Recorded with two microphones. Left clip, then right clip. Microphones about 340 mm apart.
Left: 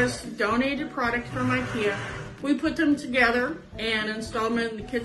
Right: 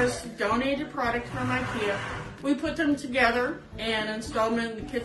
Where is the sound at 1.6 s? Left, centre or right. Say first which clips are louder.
Left 2 dB; right.